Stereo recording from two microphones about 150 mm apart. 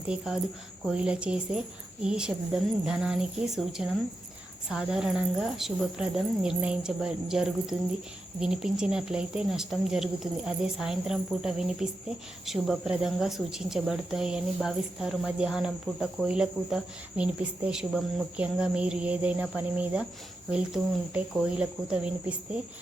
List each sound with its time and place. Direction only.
0.3 s speech: centre (ahead or behind)